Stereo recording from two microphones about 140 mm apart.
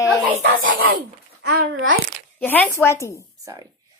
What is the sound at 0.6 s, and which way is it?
Speech, 90° right.